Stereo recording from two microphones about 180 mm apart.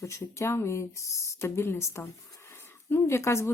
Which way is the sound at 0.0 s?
15° left (ahead or behind).